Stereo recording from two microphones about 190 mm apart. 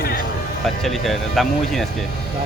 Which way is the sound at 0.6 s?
Centre (ahead or behind).